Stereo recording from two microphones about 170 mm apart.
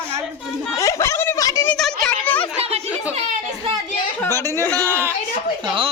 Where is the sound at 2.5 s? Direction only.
35° right (ahead or behind).